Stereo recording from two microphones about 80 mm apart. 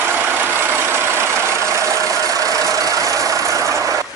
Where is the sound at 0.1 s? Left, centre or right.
Right.